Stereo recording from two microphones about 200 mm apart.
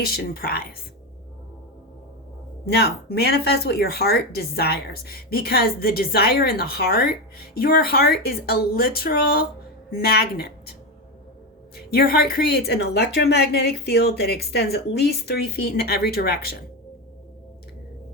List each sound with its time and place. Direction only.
0.0 s speech: 50° left (ahead or behind)
2.6 s speech: 55° left (ahead or behind)
11.9 s speech: 50° left (ahead or behind)